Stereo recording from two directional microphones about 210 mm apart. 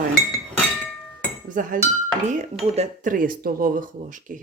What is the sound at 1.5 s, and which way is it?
Speech, 40° right (ahead or behind).